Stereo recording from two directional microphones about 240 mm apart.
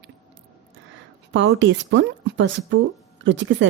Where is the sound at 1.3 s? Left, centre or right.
Right.